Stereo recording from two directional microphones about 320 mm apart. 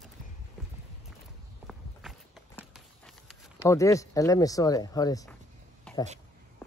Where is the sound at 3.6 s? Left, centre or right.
Centre.